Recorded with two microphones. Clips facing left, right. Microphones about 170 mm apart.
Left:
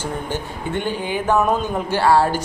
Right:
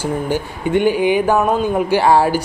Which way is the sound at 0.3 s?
10° right (ahead or behind).